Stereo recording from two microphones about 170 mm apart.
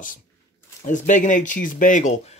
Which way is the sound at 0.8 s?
50° left (ahead or behind).